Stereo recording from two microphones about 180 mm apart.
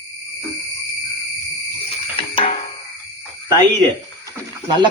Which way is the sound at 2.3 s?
30° left (ahead or behind).